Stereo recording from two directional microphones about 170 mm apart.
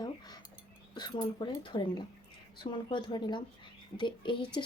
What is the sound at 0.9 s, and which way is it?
Speech, 25° left (ahead or behind).